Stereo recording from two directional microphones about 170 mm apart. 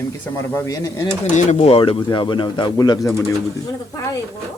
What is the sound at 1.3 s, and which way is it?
Speech, 40° left (ahead or behind).